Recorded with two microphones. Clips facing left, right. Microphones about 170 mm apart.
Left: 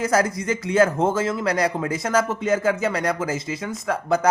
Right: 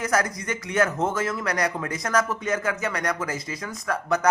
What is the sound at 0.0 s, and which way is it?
Speech, 30° left (ahead or behind).